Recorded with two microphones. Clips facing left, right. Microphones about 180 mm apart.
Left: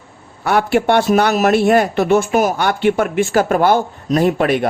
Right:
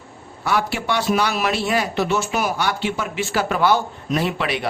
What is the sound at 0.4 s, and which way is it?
Speech, 55° left (ahead or behind).